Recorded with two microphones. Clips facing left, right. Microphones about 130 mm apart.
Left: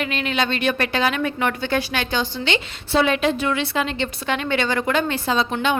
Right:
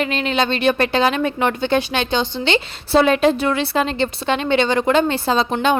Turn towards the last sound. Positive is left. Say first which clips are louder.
# right 3 dB
turn(degrees=-35)  # may be behind; listen again after turning